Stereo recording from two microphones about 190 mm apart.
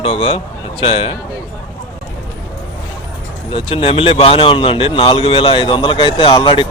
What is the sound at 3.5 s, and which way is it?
Speech, 30° left (ahead or behind).